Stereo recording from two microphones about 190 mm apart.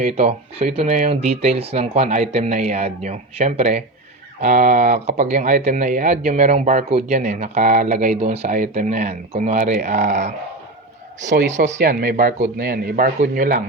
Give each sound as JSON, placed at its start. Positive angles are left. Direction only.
{"t": 0.2, "sound": "speech", "side_deg": -35}
{"t": 11.8, "sound": "speech", "side_deg": -50}